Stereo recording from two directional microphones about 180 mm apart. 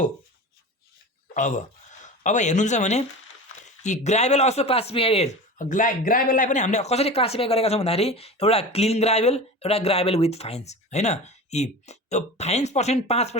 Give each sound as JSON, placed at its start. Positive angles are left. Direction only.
{"t": 1.3, "sound": "speech", "side_deg": 45}